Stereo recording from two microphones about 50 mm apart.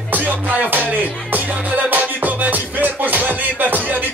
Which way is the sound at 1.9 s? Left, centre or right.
Right.